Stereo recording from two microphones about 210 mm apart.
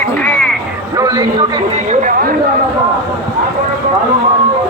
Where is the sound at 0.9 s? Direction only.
20° right (ahead or behind).